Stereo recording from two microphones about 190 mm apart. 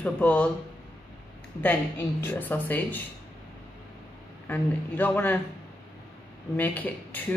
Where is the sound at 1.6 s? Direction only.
10° left (ahead or behind).